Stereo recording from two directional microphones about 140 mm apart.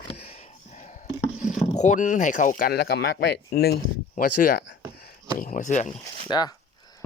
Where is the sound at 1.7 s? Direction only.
60° left (ahead or behind).